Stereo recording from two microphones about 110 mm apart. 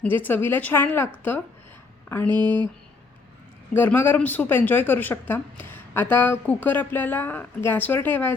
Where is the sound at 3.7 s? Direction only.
20° left (ahead or behind).